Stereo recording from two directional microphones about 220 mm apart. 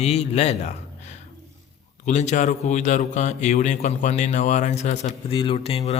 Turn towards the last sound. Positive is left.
turn(degrees=25)  # may be behind; listen again after turning